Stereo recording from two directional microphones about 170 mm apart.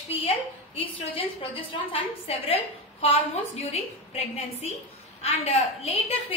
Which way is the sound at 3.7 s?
40° left (ahead or behind).